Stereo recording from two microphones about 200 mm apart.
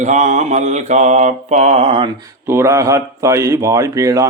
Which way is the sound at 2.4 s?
15° right (ahead or behind).